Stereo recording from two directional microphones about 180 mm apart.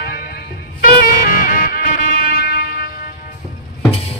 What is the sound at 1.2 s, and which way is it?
Music, 50° left (ahead or behind).